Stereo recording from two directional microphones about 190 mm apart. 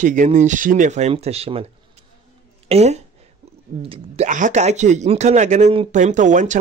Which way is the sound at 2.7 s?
35° right (ahead or behind).